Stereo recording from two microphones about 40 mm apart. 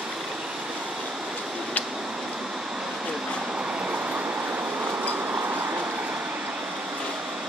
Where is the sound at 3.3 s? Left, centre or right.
Right.